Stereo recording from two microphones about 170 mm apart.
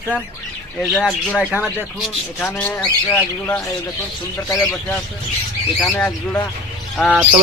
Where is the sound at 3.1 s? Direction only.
10° left (ahead or behind).